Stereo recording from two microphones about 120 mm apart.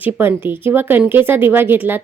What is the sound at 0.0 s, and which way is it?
Speech, 15° right (ahead or behind).